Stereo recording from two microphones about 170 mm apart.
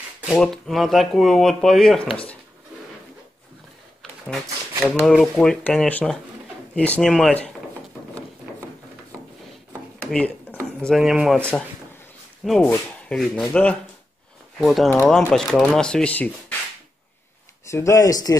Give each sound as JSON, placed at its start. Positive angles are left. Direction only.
{"t": 0.4, "sound": "speech", "side_deg": 0}
{"t": 4.8, "sound": "speech", "side_deg": 5}
{"t": 10.1, "sound": "a sound", "side_deg": 10}
{"t": 10.8, "sound": "speech", "side_deg": 0}
{"t": 17.6, "sound": "speech", "side_deg": 15}